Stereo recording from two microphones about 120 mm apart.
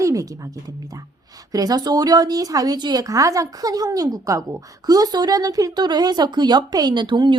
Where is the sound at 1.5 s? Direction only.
30° right (ahead or behind).